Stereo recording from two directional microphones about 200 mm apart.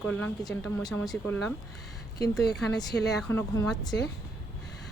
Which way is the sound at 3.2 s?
10° left (ahead or behind).